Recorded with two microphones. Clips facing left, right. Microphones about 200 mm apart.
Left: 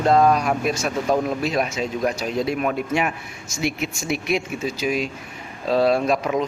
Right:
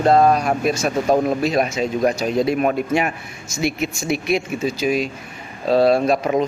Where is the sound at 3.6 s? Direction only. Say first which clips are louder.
Right 3 dB; 40° right (ahead or behind).